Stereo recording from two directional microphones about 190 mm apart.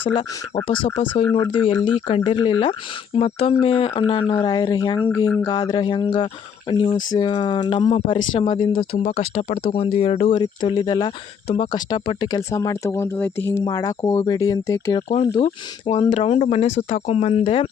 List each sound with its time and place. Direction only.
0.1 s speech: 25° left (ahead or behind)
15.9 s speech: 30° left (ahead or behind)